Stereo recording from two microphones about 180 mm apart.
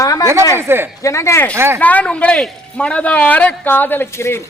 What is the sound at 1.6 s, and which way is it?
Speech, 15° right (ahead or behind).